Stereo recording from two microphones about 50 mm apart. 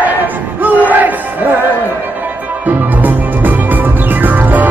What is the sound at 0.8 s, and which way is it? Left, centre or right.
Battle cry, right.